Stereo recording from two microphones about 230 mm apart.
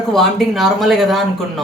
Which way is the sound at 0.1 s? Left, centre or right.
Centre.